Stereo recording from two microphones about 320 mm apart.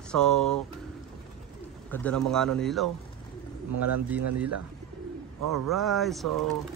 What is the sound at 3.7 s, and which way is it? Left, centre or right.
Speech, right.